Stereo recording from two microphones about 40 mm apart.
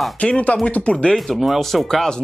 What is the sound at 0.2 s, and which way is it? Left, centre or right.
Speech, left.